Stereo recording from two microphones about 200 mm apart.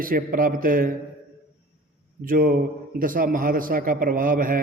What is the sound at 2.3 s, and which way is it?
Mantra, 45° right (ahead or behind).